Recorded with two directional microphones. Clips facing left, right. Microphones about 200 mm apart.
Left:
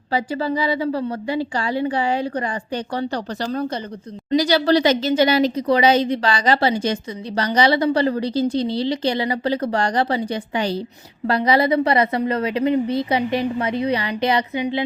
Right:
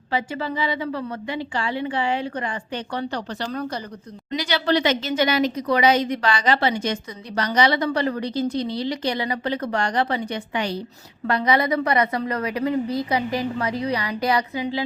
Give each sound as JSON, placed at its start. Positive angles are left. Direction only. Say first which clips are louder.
{"t": 0.1, "sound": "a woman's voice", "louder": "left 4 dB", "side_deg": 35}